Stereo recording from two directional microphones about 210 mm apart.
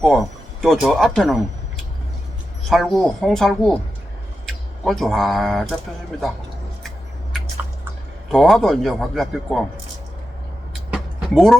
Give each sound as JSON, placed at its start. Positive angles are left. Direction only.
{"t": 0.0, "sound": "speech", "side_deg": 0}
{"t": 2.6, "sound": "a man's voice", "side_deg": 0}
{"t": 8.3, "sound": "a man's voice", "side_deg": 0}
{"t": 10.9, "sound": "vehicle", "side_deg": 0}